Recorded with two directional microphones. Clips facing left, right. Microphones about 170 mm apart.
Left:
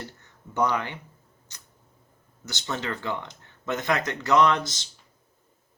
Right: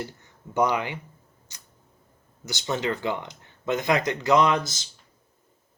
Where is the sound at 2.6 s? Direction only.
15° right (ahead or behind).